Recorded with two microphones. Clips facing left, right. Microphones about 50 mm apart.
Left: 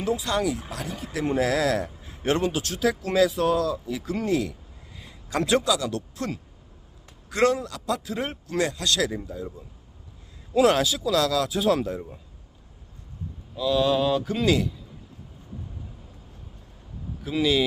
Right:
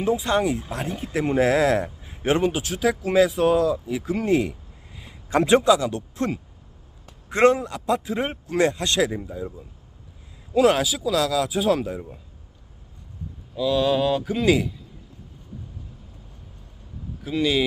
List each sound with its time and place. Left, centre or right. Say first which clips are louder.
0.0 s speech: right 4 dB; right
4.3 s speech: right 5 dB; right
10.5 s speech: right 1 dB; centre
13.6 s speech: right 1 dB; centre
17.2 s speech: right 1 dB; centre